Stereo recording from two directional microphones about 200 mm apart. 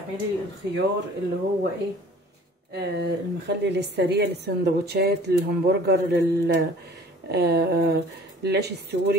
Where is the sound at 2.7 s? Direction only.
55° right (ahead or behind).